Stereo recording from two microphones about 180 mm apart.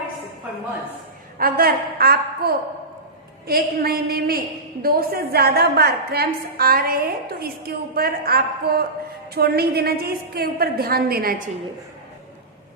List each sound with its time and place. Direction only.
1.4 s a woman's voice: 55° right (ahead or behind)